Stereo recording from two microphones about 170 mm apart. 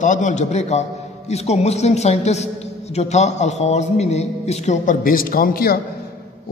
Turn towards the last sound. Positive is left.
turn(degrees=60)  # may be behind; listen again after turning